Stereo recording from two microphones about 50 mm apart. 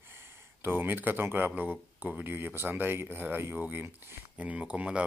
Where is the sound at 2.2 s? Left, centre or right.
Right.